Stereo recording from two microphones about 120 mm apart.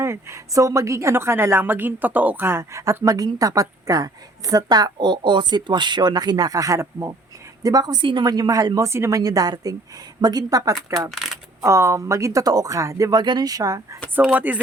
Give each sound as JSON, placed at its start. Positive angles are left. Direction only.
{"t": 0.0, "sound": "a woman's voice", "side_deg": -20}
{"t": 11.1, "sound": "speech", "side_deg": 0}
{"t": 11.6, "sound": "a woman's voice", "side_deg": -25}
{"t": 14.2, "sound": "speech", "side_deg": -15}